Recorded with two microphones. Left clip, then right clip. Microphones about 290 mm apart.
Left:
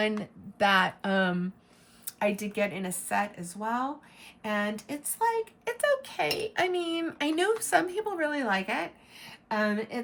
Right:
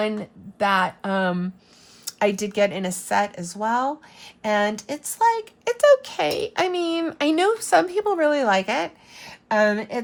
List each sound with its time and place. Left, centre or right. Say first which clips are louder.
0.2 s speech: right 3 dB; centre
2.0 s speech: right 7 dB; right